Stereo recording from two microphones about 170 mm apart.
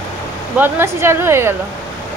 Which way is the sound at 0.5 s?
15° right (ahead or behind).